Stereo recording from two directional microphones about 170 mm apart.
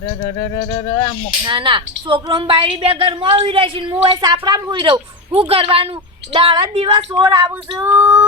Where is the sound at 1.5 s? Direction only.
30° right (ahead or behind).